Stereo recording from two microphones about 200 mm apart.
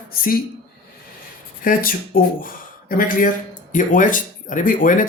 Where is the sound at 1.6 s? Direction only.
45° left (ahead or behind).